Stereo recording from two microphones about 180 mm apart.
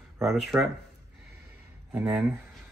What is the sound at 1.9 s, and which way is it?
Speech, 10° right (ahead or behind).